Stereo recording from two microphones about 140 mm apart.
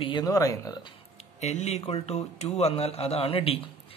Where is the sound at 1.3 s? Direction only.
50° left (ahead or behind).